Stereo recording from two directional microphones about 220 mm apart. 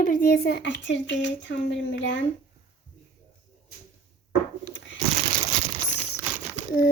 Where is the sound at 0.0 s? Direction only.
40° left (ahead or behind).